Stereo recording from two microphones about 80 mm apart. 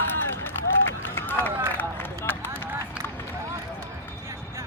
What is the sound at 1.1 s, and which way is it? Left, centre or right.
Run, left.